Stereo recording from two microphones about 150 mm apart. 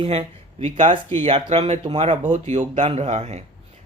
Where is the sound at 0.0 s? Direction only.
45° right (ahead or behind).